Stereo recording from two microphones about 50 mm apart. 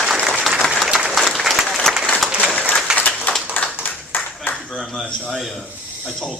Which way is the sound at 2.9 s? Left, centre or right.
Centre.